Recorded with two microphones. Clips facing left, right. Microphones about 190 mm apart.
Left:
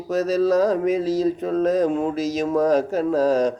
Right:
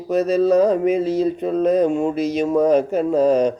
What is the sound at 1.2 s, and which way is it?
Speech, 5° right (ahead or behind).